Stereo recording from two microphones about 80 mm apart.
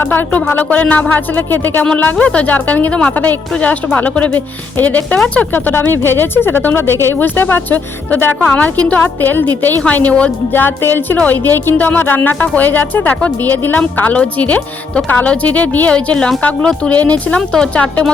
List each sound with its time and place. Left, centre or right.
0.0 s speech: left
10.5 s speech: left; by 18.1 s centre